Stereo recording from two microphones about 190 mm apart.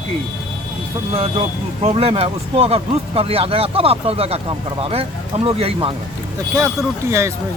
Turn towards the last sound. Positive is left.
turn(degrees=-15)  # may be behind; listen again after turning